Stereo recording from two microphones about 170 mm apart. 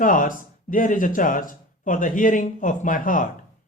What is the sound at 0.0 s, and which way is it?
Speech, 55° left (ahead or behind).